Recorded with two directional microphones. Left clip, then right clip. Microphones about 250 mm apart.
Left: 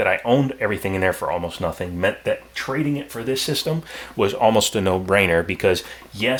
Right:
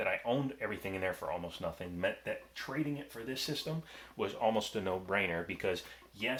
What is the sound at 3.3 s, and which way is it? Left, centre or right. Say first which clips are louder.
Speech: left 16 dB; left.